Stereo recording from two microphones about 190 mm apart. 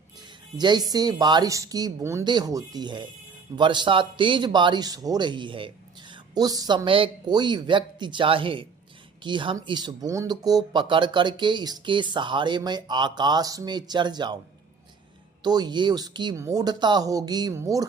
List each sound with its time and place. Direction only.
0.5 s speech: 20° right (ahead or behind)
15.4 s speech: 20° right (ahead or behind)